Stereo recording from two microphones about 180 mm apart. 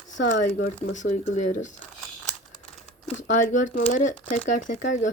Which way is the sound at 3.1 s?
45° left (ahead or behind).